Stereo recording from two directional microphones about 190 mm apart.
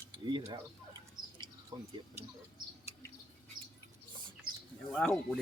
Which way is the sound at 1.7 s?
25° right (ahead or behind).